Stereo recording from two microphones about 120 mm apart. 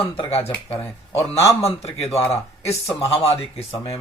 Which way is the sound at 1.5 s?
65° left (ahead or behind).